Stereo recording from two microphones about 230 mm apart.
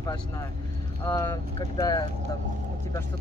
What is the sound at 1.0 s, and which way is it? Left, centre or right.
Speech, centre.